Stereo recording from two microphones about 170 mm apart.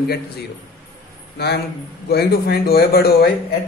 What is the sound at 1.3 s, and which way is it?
A man's voice, 70° left (ahead or behind).